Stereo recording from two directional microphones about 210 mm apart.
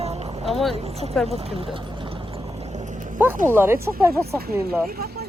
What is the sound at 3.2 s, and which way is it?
Speech, 10° right (ahead or behind).